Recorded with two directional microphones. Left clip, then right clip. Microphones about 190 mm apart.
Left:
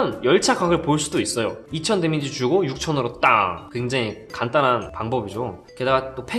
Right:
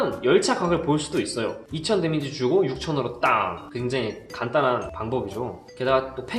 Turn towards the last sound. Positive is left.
turn(degrees=30)  # may be behind; listen again after turning